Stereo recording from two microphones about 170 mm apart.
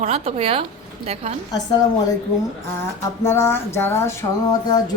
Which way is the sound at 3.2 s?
15° left (ahead or behind).